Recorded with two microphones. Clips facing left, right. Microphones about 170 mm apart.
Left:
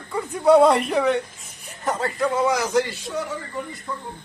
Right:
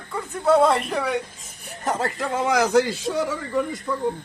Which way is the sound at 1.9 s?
90° right.